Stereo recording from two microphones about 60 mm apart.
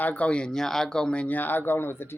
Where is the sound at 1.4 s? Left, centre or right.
Left.